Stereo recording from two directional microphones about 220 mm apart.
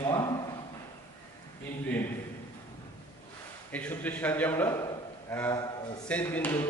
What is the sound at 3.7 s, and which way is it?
A man's voice, 5° left (ahead or behind).